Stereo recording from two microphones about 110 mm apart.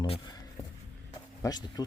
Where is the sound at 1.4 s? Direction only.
35° left (ahead or behind).